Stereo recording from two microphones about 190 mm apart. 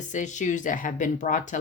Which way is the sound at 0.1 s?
40° left (ahead or behind).